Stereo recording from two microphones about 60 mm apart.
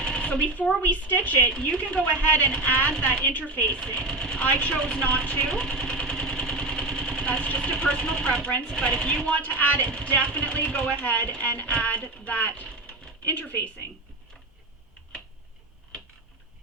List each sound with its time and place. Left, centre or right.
0.0 s a sound: centre
0.8 s speech: left
5.5 s vehicle: centre
7.3 s speech: left